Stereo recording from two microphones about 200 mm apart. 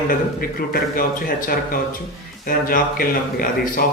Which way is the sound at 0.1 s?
45° left (ahead or behind).